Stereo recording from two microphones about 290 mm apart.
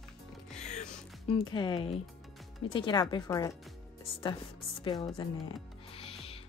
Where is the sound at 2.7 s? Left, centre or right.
Centre.